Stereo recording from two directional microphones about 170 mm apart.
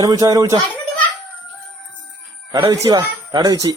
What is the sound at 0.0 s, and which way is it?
Speech, 20° right (ahead or behind).